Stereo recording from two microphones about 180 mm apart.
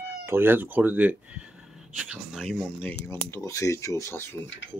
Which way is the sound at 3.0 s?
15° left (ahead or behind).